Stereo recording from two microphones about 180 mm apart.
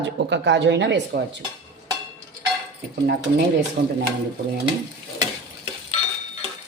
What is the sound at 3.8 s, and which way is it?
Speech, 65° right (ahead or behind).